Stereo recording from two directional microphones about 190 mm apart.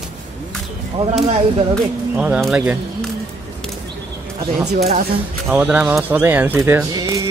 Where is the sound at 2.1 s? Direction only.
5° right (ahead or behind).